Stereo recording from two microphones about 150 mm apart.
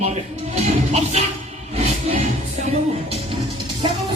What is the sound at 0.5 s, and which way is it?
Music, 45° right (ahead or behind).